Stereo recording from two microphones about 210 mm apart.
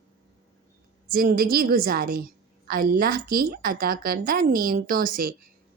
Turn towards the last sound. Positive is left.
turn(degrees=-45)  # may be behind; listen again after turning